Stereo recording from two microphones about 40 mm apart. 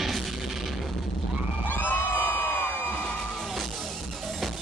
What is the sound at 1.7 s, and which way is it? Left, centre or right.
Crowd, left.